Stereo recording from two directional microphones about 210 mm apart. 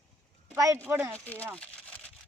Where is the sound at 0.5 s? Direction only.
15° right (ahead or behind).